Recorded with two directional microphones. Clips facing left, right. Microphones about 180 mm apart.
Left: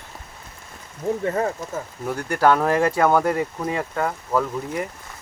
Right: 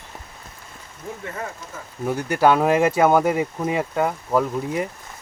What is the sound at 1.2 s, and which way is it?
Speech, 35° left (ahead or behind).